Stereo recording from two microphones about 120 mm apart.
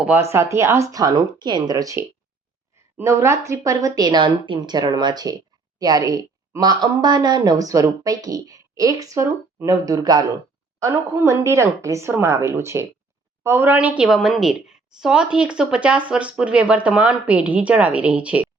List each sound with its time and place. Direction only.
0.0 s a woman's voice: 15° right (ahead or behind)